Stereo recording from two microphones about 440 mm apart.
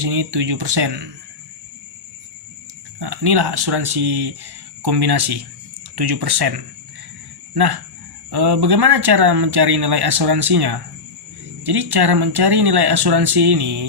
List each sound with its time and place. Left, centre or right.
0.0 s speech: right
3.0 s speech: right
7.5 s speech: right